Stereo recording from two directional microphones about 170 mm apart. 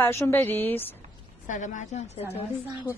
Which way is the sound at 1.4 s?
45° left (ahead or behind).